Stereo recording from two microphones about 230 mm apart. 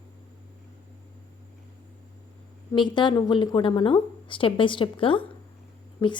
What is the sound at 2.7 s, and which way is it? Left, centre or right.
A woman's voice, centre.